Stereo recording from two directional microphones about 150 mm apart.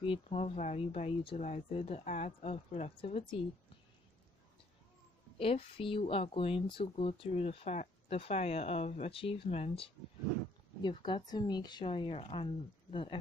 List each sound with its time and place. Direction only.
0.0 s speech: 40° left (ahead or behind)
5.4 s speech: 35° left (ahead or behind)
10.8 s speech: 30° left (ahead or behind)